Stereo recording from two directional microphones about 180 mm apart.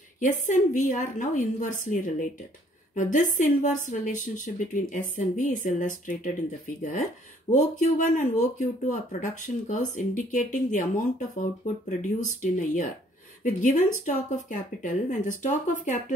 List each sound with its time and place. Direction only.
0.2 s speech: 45° left (ahead or behind)
7.5 s speech: 45° left (ahead or behind)